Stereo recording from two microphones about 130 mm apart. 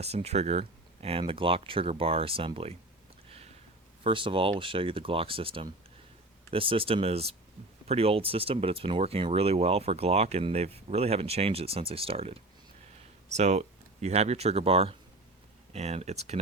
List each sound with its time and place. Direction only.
0.0 s speech: 55° right (ahead or behind)
4.0 s speech: 40° right (ahead or behind)
13.2 s speech: 60° right (ahead or behind)